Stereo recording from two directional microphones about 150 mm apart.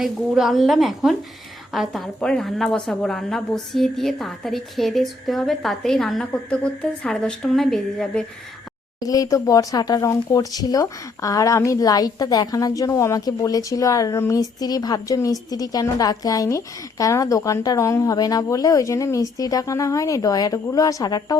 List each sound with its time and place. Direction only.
0.0 s a woman's voice: centre (ahead or behind)
9.0 s speech: 25° left (ahead or behind)